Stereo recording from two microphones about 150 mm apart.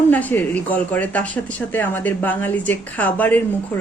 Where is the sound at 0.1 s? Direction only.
10° left (ahead or behind).